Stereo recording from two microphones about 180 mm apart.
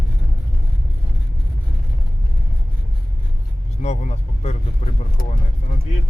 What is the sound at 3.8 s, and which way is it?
Speech, 40° left (ahead or behind).